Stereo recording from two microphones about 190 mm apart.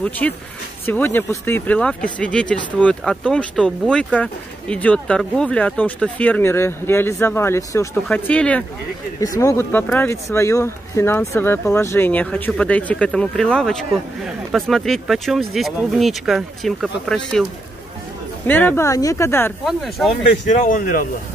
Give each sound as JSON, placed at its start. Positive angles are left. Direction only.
{"t": 0.2, "sound": "speech", "side_deg": 5}
{"t": 9.2, "sound": "speech", "side_deg": 20}
{"t": 18.5, "sound": "speech", "side_deg": 10}
{"t": 19.6, "sound": "speech", "side_deg": 0}
{"t": 20.4, "sound": "a man's voice", "side_deg": 45}